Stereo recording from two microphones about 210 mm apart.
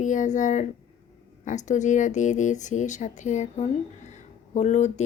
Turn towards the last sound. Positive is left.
turn(degrees=35)  # may be behind; listen again after turning